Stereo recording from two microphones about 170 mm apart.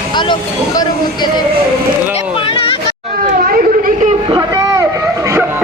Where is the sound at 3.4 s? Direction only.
50° right (ahead or behind).